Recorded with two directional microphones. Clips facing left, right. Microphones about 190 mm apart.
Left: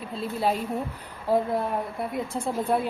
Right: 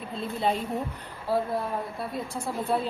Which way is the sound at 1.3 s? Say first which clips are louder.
Left 3 dB; 20° left (ahead or behind).